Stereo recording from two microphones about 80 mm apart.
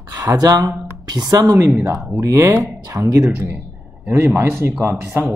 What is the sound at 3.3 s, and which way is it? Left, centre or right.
A man's voice, right.